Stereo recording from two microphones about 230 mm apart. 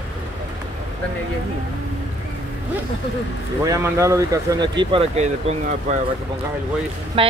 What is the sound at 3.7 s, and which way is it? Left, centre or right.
Speech, centre.